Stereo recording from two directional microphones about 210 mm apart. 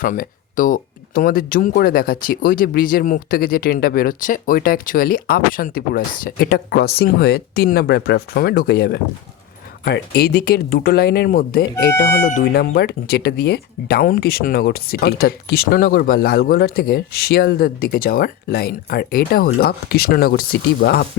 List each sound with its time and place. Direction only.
0.0 s speech: 40° left (ahead or behind)